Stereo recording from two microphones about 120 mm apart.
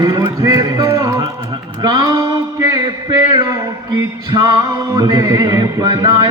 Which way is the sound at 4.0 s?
35° right (ahead or behind).